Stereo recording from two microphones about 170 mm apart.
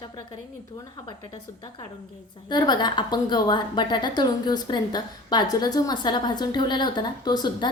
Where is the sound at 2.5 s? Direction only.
25° left (ahead or behind).